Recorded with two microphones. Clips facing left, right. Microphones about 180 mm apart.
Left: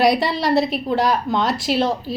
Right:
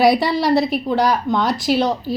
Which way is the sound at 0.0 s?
Centre (ahead or behind).